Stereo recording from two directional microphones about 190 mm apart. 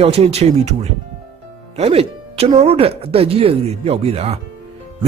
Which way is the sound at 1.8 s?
30° right (ahead or behind).